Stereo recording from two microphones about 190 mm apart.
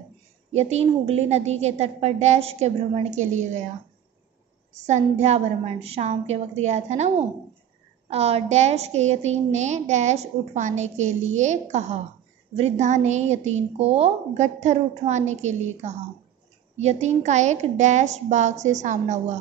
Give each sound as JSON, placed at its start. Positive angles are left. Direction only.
{"t": 0.5, "sound": "a woman's voice", "side_deg": -35}
{"t": 4.7, "sound": "a woman's voice", "side_deg": -40}